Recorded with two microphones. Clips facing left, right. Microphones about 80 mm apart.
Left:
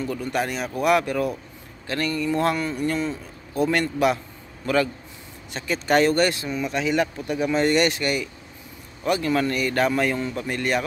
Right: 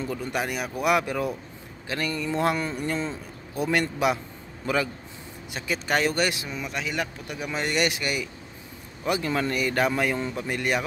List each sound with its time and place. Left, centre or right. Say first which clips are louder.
0.0 s a man's voice: left 3 dB; centre